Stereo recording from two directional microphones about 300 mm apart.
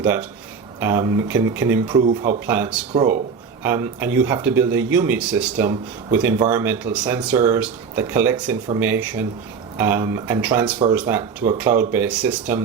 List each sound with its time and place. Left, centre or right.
0.0 s speech: centre
2.0 s speech: right
2.5 s speech: centre